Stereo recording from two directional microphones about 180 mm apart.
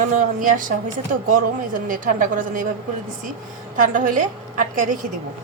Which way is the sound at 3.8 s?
45° right (ahead or behind).